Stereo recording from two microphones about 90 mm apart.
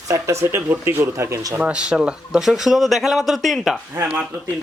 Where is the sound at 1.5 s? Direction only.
10° right (ahead or behind).